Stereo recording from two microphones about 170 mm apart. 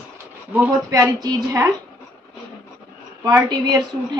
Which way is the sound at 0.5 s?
15° right (ahead or behind).